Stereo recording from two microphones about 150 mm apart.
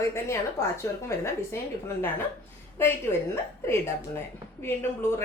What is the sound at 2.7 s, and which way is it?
Speech, 15° left (ahead or behind).